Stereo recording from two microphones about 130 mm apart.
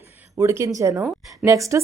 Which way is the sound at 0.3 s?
20° right (ahead or behind).